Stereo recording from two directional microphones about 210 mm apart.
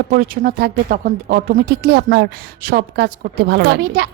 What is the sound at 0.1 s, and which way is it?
A woman's voice, 45° right (ahead or behind).